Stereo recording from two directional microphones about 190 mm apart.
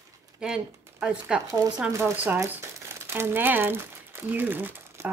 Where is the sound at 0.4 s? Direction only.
5° right (ahead or behind).